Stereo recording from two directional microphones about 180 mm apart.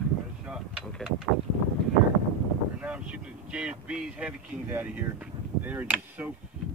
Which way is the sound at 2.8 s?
5° right (ahead or behind).